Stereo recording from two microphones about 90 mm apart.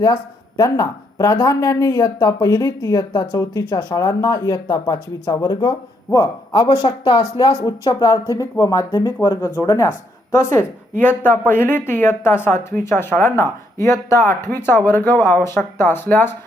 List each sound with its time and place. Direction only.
0.0 s speech: 45° left (ahead or behind)
6.1 s speech: 35° left (ahead or behind)
6.8 s speech: 90° left
7.3 s speech: 50° left (ahead or behind)
7.9 s speech: 40° left (ahead or behind)
9.6 s speech: 40° left (ahead or behind)
10.3 s speech: 30° left (ahead or behind)